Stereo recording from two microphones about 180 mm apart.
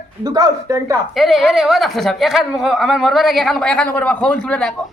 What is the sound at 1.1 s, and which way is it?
Speech, centre (ahead or behind).